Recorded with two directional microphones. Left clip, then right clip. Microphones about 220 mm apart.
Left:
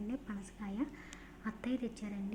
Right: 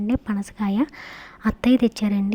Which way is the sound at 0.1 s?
45° right (ahead or behind).